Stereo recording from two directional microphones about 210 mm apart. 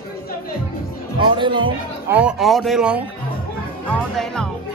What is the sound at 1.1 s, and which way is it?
Speech, 25° right (ahead or behind).